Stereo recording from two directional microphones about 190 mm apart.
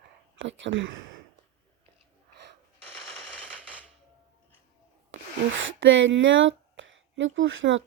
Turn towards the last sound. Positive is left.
turn(degrees=-80)